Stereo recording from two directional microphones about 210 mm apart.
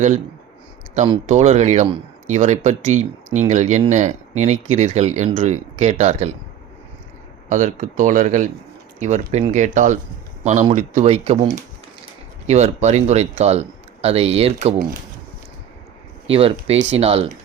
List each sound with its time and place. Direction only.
0.9 s speech: 30° right (ahead or behind)
7.5 s speech: 35° right (ahead or behind)
12.5 s speech: 30° right (ahead or behind)
16.3 s speech: 25° right (ahead or behind)